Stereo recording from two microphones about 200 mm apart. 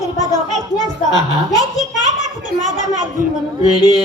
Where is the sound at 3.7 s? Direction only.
20° left (ahead or behind).